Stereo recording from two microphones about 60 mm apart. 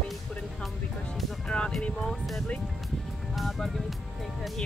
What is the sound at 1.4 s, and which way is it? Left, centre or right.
Speech, centre.